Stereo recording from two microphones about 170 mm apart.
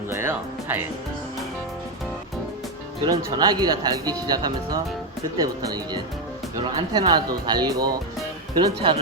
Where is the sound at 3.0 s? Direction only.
25° right (ahead or behind).